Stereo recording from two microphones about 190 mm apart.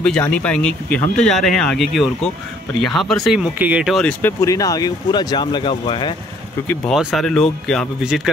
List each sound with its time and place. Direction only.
0.0 s speech: 5° left (ahead or behind); by 6.1 s 25° left (ahead or behind)
6.9 s speech: centre (ahead or behind)